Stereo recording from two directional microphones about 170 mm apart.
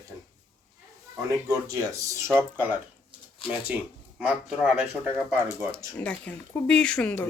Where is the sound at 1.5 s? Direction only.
20° right (ahead or behind).